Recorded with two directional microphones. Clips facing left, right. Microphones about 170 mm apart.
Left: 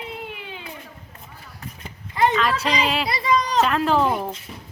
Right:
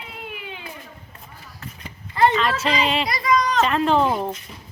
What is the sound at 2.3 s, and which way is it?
Speech, centre (ahead or behind).